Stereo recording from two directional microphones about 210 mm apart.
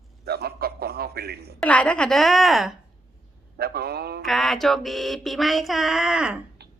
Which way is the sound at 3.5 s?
45° right (ahead or behind).